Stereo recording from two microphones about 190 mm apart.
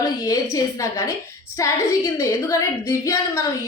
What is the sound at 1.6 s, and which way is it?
Speech, 15° left (ahead or behind).